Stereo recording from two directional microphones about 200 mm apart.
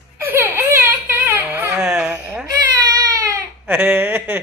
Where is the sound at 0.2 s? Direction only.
10° right (ahead or behind).